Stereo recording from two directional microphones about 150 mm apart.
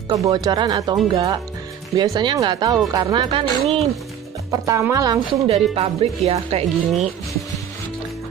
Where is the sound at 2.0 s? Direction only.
30° right (ahead or behind).